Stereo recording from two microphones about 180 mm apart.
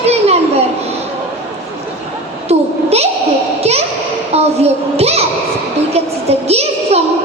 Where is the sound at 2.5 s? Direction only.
35° right (ahead or behind).